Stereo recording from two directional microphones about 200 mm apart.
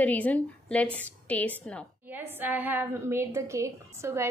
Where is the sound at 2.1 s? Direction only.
10° right (ahead or behind).